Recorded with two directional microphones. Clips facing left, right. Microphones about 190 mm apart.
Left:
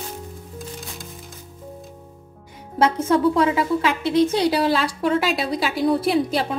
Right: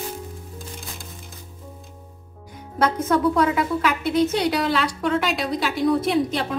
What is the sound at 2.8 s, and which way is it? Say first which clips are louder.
A woman's voice: left 2 dB; 30° left (ahead or behind).